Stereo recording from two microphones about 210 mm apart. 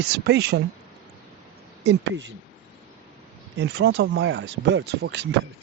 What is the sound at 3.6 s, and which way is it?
Speech, 55° right (ahead or behind).